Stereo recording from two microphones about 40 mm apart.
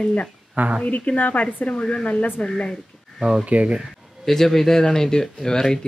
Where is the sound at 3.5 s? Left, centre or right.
Right.